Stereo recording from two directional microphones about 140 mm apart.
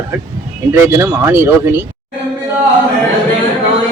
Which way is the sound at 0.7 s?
20° right (ahead or behind).